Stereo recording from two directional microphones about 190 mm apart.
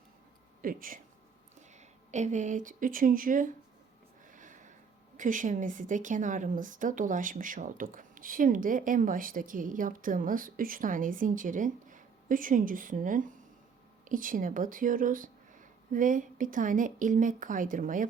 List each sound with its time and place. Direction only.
0.6 s speech: 45° right (ahead or behind)
2.0 s a woman's voice: 40° right (ahead or behind)
4.3 s a sound: 40° right (ahead or behind)
5.1 s a woman's voice: 45° right (ahead or behind)